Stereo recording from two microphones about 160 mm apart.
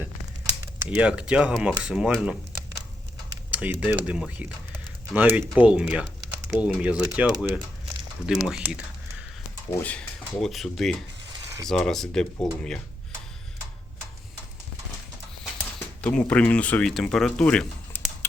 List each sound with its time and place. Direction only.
0.6 s speech: 10° right (ahead or behind)
9.6 s speech: 10° left (ahead or behind)
11.3 s a sound: 20° right (ahead or behind)
11.7 s speech: 5° left (ahead or behind)
16.0 s speech: 10° left (ahead or behind)